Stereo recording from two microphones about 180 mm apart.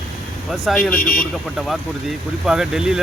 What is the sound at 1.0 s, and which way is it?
Speech, 50° left (ahead or behind).